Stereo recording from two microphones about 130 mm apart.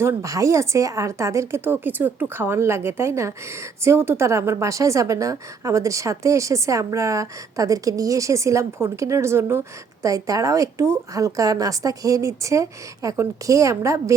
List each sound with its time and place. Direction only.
0.0 s a woman's voice: 25° right (ahead or behind)